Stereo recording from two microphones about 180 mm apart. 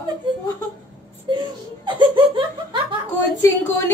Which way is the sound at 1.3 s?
25° right (ahead or behind).